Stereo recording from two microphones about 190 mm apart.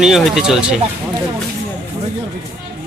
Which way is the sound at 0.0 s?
Centre (ahead or behind).